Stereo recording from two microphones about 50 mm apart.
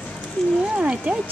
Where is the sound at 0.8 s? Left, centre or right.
Right.